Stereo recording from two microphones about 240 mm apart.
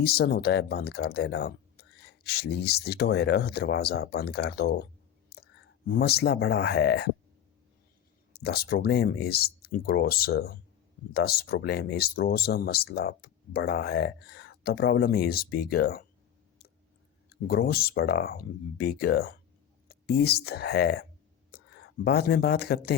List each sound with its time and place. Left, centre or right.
0.0 s speech: left
8.3 s speech: left
17.2 s speech: left